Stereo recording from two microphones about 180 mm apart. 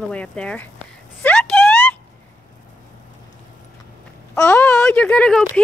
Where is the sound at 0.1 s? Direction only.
5° left (ahead or behind).